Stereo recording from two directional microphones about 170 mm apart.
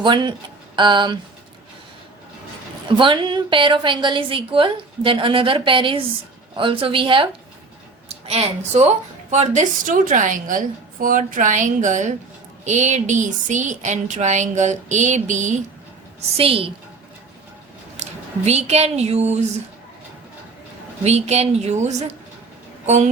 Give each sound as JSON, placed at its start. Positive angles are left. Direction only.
{"t": 0.0, "sound": "a woman's voice", "side_deg": -25}
{"t": 3.0, "sound": "a woman's voice", "side_deg": -30}
{"t": 16.4, "sound": "a woman's voice", "side_deg": -35}
{"t": 17.9, "sound": "speech", "side_deg": -40}
{"t": 21.0, "sound": "a woman's voice", "side_deg": -40}